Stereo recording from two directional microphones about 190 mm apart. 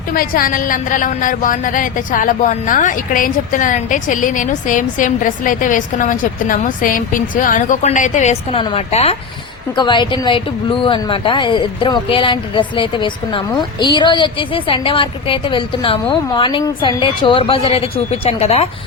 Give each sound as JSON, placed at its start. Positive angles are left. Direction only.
{"t": 0.1, "sound": "a woman's voice", "side_deg": 50}